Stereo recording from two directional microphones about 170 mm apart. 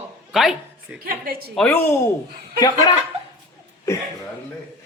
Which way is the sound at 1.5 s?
10° left (ahead or behind).